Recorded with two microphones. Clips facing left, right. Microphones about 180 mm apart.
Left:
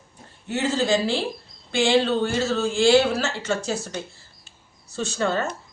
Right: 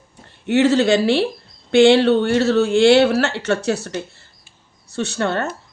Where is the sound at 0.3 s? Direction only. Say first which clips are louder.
Right 10 dB; 70° right (ahead or behind).